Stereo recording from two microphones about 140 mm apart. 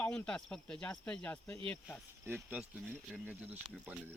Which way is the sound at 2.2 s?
15° right (ahead or behind).